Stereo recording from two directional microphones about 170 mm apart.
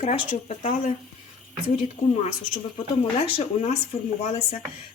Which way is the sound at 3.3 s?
35° left (ahead or behind).